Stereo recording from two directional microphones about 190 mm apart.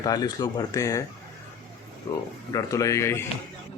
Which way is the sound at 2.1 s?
20° left (ahead or behind).